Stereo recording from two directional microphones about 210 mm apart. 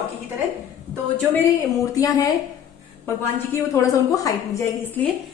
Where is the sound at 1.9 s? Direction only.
15° left (ahead or behind).